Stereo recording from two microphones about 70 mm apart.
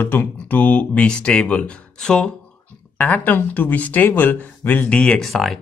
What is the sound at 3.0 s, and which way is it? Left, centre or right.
Speech, left.